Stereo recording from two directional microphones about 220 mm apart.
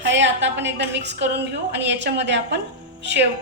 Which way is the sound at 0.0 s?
55° right (ahead or behind).